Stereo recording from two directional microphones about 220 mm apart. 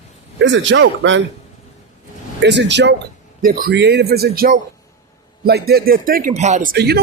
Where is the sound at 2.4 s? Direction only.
55° right (ahead or behind).